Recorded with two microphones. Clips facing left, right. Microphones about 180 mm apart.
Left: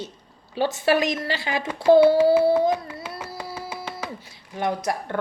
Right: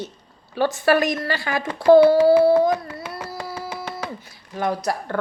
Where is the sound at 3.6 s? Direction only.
5° left (ahead or behind).